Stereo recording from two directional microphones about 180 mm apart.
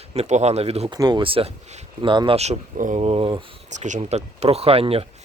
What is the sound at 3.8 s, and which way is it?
Speech, 40° right (ahead or behind).